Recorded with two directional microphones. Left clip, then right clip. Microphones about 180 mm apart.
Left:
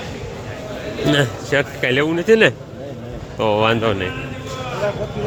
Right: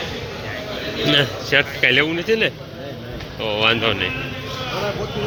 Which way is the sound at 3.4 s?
35° left (ahead or behind).